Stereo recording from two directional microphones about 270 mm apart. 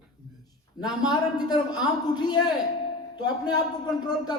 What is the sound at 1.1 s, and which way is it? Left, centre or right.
A man's voice, centre.